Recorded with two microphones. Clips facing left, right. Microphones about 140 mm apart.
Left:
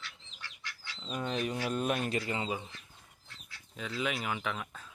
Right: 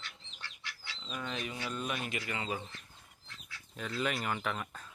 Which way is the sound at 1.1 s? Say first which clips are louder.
Left 6 dB; 40° left (ahead or behind).